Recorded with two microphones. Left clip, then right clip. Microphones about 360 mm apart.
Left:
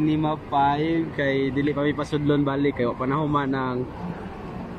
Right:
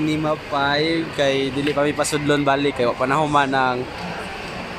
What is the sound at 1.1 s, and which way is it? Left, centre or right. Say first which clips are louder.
Speech: right 4 dB; right.